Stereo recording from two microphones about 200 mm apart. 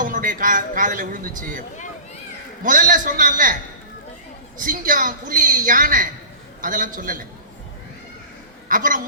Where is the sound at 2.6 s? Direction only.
40° right (ahead or behind).